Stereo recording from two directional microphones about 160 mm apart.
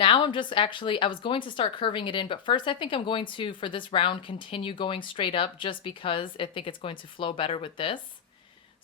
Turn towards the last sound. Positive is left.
turn(degrees=30)  # may be behind; listen again after turning